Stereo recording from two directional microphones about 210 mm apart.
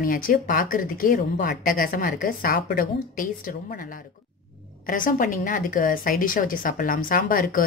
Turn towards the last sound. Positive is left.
turn(degrees=45)  # may be behind; listen again after turning